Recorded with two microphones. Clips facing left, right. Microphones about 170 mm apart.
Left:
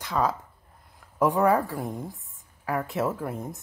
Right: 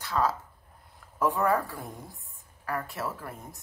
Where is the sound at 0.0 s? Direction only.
15° left (ahead or behind).